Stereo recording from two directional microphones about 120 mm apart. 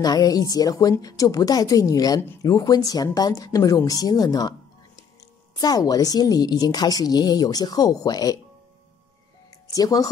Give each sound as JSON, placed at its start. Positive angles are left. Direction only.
{"t": 0.0, "sound": "a woman's voice", "side_deg": 30}
{"t": 5.6, "sound": "a woman's voice", "side_deg": 30}
{"t": 9.5, "sound": "music", "side_deg": 30}